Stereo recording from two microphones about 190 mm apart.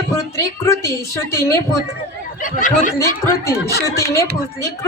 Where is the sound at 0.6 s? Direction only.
15° left (ahead or behind).